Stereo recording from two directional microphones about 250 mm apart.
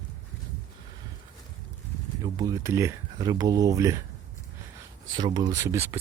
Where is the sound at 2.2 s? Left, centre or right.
Centre.